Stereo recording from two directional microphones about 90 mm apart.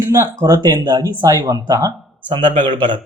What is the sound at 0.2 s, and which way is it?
Speech, 30° right (ahead or behind).